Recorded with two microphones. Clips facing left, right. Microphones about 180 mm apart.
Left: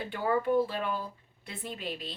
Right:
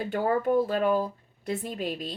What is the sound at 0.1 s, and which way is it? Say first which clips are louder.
Speech: right 3 dB; 45° right (ahead or behind).